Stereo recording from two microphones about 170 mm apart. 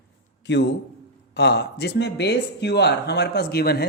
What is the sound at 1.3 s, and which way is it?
Speech, 80° left.